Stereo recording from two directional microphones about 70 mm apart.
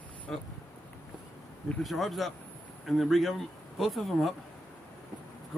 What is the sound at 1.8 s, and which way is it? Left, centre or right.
Speech, centre.